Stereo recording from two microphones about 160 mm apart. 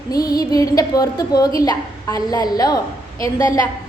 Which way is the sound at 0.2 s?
25° left (ahead or behind).